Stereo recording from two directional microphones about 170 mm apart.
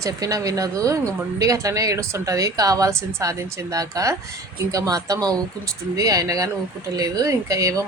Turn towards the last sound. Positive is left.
turn(degrees=-20)  # may be behind; listen again after turning